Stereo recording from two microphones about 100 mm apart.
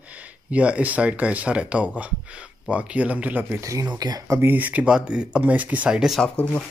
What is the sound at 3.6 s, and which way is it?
Speech, 35° right (ahead or behind).